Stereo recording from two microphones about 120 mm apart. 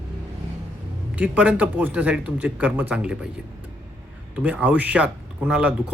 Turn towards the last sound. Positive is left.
turn(degrees=-10)  # may be behind; listen again after turning